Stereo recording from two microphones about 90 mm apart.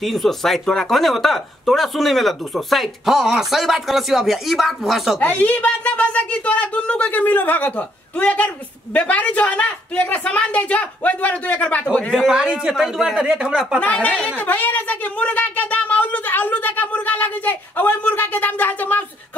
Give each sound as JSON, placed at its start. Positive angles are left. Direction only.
{"t": 0.0, "sound": "speech", "side_deg": 0}
{"t": 5.2, "sound": "speech", "side_deg": 15}
{"t": 12.1, "sound": "speech", "side_deg": -5}
{"t": 13.7, "sound": "speech", "side_deg": 15}